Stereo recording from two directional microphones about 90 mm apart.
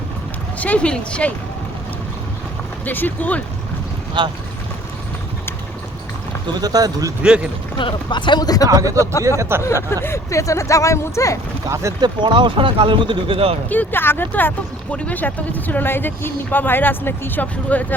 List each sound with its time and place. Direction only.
0.6 s speech: 15° left (ahead or behind)
2.8 s speech: 20° left (ahead or behind)
4.2 s speech: 60° right (ahead or behind)
6.5 s speech: 45° right (ahead or behind)
7.2 s speech: 15° right (ahead or behind)
7.8 s speech: 65° left (ahead or behind)
8.6 s speech: 40° right (ahead or behind)
9.4 s speech: 25° right (ahead or behind)
9.9 s speech: 30° left (ahead or behind)
11.7 s speech: 35° right (ahead or behind)
11.9 s speech: 60° right (ahead or behind); by 13.6 s 85° right
13.7 s speech: 20° left (ahead or behind)